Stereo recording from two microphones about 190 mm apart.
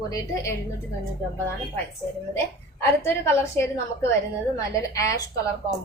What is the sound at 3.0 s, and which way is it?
A woman's voice, 10° left (ahead or behind).